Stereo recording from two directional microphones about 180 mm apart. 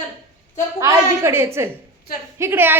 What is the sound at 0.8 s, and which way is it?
A woman's voice, 15° right (ahead or behind).